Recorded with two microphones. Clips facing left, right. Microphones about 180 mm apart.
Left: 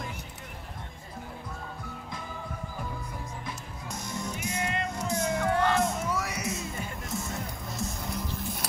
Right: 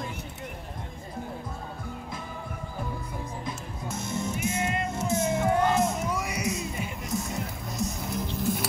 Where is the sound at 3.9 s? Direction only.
25° right (ahead or behind).